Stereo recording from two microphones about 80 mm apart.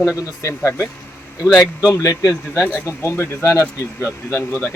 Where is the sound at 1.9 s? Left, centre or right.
Left.